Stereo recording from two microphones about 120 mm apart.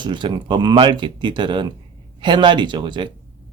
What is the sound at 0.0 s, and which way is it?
Speech, 40° right (ahead or behind).